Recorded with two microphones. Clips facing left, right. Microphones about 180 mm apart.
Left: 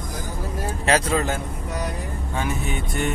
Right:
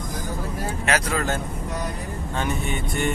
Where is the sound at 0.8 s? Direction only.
30° left (ahead or behind).